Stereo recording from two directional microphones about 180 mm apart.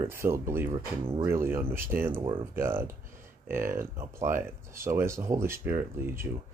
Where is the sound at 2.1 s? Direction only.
30° right (ahead or behind).